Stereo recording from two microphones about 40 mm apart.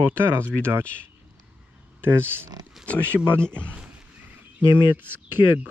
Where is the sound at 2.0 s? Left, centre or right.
Right.